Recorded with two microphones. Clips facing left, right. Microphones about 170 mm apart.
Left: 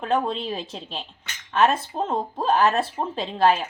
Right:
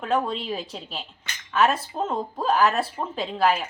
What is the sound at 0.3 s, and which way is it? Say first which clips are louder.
Speech: left 1 dB; 30° left (ahead or behind).